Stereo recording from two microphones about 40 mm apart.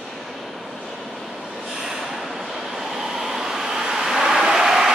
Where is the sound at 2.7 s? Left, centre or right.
Centre.